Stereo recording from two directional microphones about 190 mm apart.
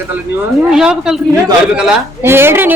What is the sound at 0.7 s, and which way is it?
A man's voice, 5° right (ahead or behind).